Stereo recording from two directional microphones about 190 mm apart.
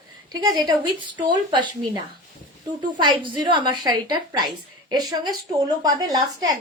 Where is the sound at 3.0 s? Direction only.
20° right (ahead or behind).